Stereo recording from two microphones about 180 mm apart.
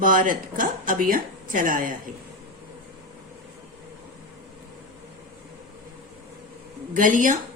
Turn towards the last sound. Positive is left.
turn(degrees=-45)  # may be behind; listen again after turning